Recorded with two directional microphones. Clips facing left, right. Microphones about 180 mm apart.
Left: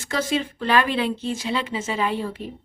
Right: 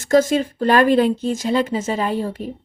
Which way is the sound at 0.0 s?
45° right (ahead or behind).